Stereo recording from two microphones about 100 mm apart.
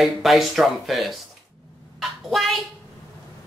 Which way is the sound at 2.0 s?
Centre (ahead or behind).